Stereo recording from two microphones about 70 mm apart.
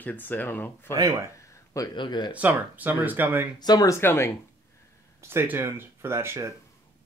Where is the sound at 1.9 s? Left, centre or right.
Left.